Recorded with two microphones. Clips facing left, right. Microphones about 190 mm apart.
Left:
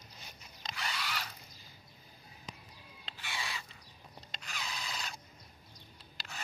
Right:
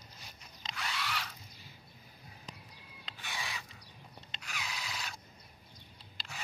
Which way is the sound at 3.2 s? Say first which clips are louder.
Even; 15° right (ahead or behind).